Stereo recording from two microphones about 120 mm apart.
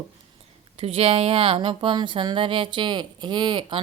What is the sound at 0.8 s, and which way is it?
Speech, 50° right (ahead or behind).